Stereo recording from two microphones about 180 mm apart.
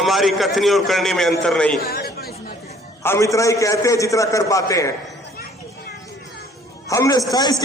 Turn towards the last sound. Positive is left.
turn(degrees=20)  # may be behind; listen again after turning